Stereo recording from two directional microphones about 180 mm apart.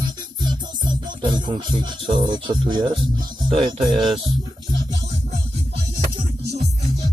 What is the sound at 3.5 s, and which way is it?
Music, 35° right (ahead or behind).